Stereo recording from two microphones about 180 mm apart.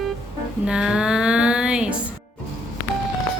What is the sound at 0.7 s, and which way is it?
Music, 5° right (ahead or behind).